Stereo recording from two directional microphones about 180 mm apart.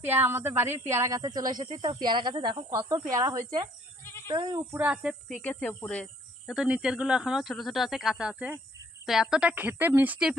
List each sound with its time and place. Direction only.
0.0 s speech: 10° right (ahead or behind)
4.7 s a woman's voice: 5° right (ahead or behind)